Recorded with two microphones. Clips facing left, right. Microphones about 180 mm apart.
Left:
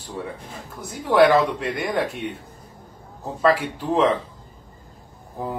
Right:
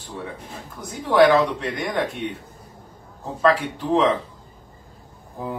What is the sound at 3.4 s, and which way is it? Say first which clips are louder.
Speech: even; centre (ahead or behind).